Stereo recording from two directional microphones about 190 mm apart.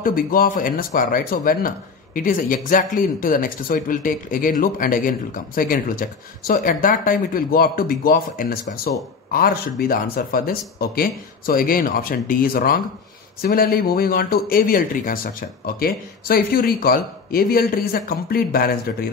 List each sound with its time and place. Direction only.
0.0 s speech: 50° left (ahead or behind)